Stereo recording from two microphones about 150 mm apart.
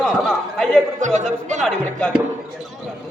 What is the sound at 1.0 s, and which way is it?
Speech, 55° right (ahead or behind).